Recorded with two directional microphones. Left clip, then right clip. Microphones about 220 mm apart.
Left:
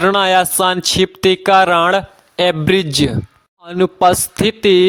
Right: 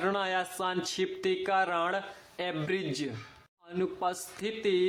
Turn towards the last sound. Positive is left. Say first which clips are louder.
# left 18 dB
turn(degrees=45)  # may be behind; listen again after turning